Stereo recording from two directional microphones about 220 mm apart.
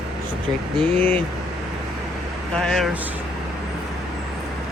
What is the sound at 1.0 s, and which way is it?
Speech, 10° left (ahead or behind).